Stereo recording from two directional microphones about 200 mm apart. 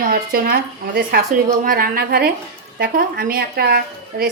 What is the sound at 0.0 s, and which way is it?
A woman's voice, 45° right (ahead or behind).